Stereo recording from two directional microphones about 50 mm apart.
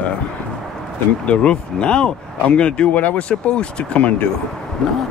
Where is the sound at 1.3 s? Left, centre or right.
Left.